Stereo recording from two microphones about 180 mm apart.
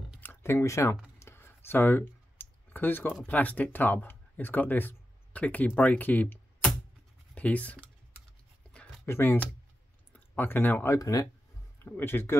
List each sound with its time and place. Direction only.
0.2 s a sound: 10° left (ahead or behind)
3.2 s speech: 10° left (ahead or behind)
8.7 s writing: 15° left (ahead or behind)
10.1 s speech: 10° left (ahead or behind)